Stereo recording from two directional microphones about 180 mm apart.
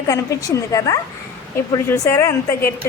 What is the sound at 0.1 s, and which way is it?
Speech, 15° left (ahead or behind).